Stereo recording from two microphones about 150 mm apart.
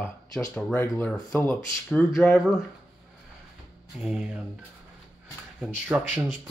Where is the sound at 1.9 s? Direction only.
5° left (ahead or behind).